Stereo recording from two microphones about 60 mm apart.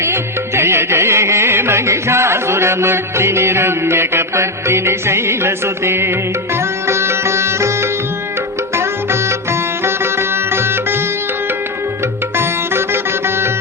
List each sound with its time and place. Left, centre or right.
0.0 s music: right
6.8 s sitar: right
9.5 s sitar: right
12.4 s sitar: right